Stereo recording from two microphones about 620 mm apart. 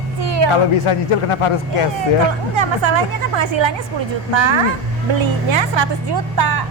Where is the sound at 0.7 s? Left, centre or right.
Left.